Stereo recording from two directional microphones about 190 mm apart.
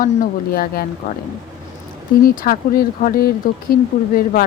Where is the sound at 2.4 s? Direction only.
50° left (ahead or behind).